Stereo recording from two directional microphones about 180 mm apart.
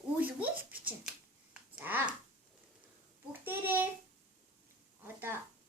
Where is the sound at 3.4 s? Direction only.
10° right (ahead or behind).